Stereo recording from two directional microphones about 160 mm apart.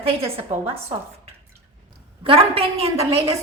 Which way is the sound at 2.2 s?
35° right (ahead or behind).